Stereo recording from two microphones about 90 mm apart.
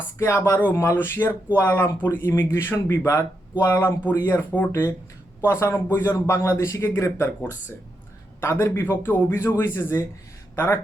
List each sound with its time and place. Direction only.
0.2 s a man's voice: 25° left (ahead or behind)
8.4 s a man's voice: 30° left (ahead or behind)